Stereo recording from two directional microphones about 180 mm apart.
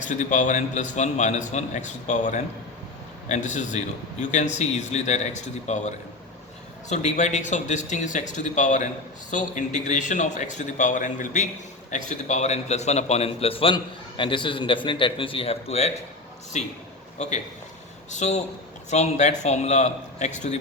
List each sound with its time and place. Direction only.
0.1 s a man's voice: 45° left (ahead or behind)